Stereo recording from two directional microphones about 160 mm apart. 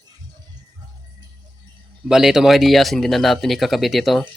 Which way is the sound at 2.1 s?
5° right (ahead or behind).